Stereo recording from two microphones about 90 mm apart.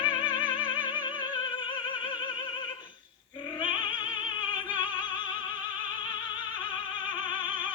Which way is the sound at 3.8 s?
15° right (ahead or behind).